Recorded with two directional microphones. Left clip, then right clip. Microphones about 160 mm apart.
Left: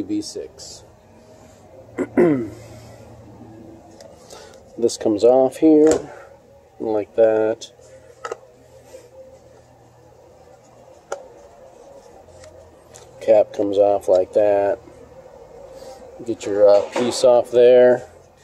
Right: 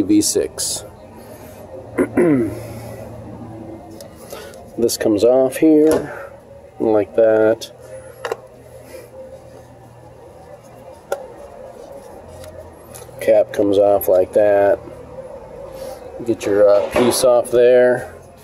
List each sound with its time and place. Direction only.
0.1 s speech: 25° right (ahead or behind)
2.0 s a sound: centre (ahead or behind)
4.3 s speech: centre (ahead or behind)
13.2 s speech: 5° right (ahead or behind)
16.3 s speech: 10° left (ahead or behind)